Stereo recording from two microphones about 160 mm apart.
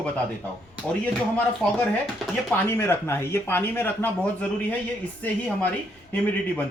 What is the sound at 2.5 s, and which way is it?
Speech, 15° left (ahead or behind).